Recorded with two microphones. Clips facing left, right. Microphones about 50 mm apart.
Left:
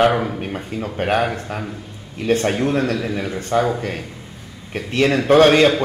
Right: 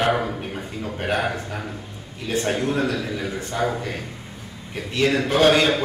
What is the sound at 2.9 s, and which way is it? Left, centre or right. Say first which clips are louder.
Speech: left 4 dB; left.